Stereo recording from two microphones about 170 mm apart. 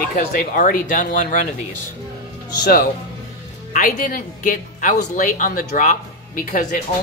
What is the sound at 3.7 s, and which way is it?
Speech, 55° left (ahead or behind).